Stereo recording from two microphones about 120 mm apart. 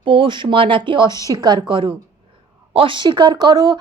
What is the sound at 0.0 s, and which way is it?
A woman's voice, 45° right (ahead or behind).